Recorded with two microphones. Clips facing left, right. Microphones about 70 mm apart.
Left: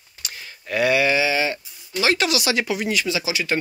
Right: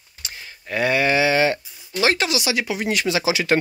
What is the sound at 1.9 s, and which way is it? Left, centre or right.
Speech, right.